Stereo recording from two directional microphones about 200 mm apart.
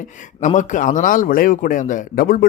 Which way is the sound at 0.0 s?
40° left (ahead or behind).